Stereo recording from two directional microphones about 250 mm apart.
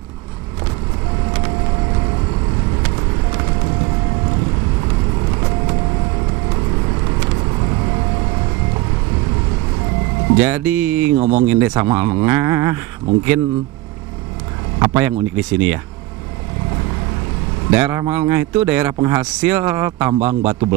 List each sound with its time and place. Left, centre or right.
10.3 s speech: centre
11.1 s speech: right
11.4 s speech: centre
14.8 s speech: centre
17.6 s speech: centre